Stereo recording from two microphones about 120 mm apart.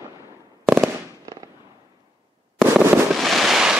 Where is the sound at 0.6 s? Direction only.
5° right (ahead or behind).